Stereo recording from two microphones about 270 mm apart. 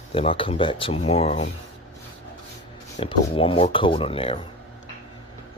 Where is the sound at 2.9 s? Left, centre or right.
Centre.